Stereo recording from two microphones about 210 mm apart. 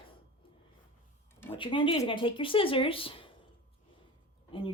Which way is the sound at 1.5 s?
25° left (ahead or behind).